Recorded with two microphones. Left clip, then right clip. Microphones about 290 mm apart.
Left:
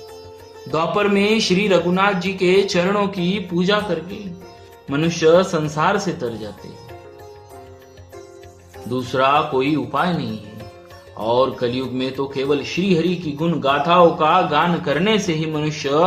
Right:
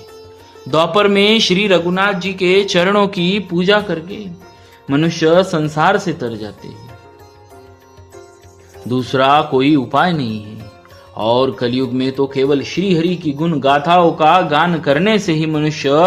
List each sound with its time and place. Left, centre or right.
0.7 s speech: right
8.9 s speech: right